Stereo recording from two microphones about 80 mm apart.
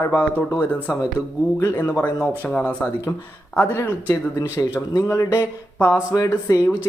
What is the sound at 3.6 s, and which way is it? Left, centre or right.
Speech, left.